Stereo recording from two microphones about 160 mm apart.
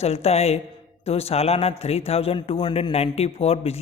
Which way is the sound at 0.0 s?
40° left (ahead or behind).